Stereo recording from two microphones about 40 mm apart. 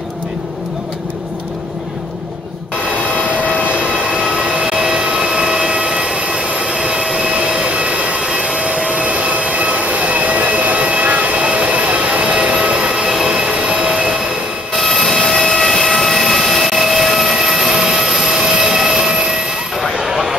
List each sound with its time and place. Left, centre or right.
3.6 s train: right
8.9 s jet engine: right
12.9 s train: centre
14.8 s a sound: centre
20.0 s vehicle: centre